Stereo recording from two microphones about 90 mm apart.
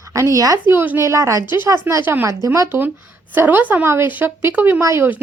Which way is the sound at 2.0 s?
25° right (ahead or behind).